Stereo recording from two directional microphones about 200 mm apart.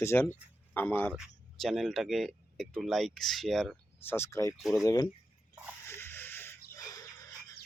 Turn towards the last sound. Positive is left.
turn(degrees=15)  # may be behind; listen again after turning